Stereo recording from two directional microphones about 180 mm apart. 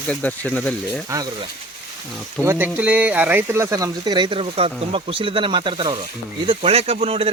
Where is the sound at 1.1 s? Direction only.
20° right (ahead or behind).